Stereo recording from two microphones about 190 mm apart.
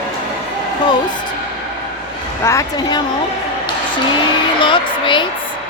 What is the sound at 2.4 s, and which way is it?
Speech, 20° left (ahead or behind).